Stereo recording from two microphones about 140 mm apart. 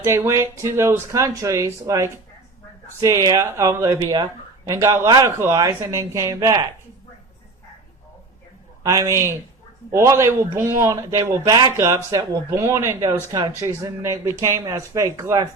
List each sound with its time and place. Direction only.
0.0 s speech: 20° right (ahead or behind)
8.8 s speech: 25° right (ahead or behind)